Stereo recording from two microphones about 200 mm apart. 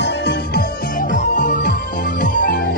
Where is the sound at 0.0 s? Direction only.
55° left (ahead or behind).